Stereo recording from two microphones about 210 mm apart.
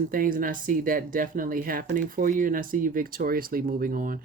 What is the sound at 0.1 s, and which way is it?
Speech, 40° right (ahead or behind).